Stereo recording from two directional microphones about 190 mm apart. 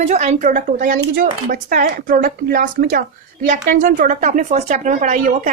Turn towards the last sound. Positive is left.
turn(degrees=-40)  # may be behind; listen again after turning